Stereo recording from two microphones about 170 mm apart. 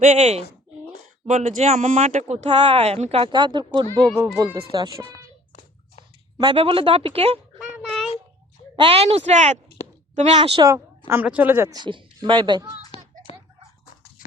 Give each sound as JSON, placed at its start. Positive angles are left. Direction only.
{"t": 0.0, "sound": "speech", "side_deg": -40}
{"t": 4.5, "sound": "speech", "side_deg": -30}
{"t": 5.0, "sound": "music", "side_deg": 35}
{"t": 6.4, "sound": "speech", "side_deg": -30}
{"t": 7.6, "sound": "child singing", "side_deg": 0}
{"t": 8.7, "sound": "speech", "side_deg": -35}
{"t": 10.3, "sound": "speech", "side_deg": -30}
{"t": 11.1, "sound": "a woman's voice", "side_deg": -10}
{"t": 11.8, "sound": "speech", "side_deg": -30}
{"t": 13.3, "sound": "a sound", "side_deg": 30}